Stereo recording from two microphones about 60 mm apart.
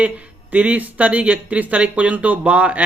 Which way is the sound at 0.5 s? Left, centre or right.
Right.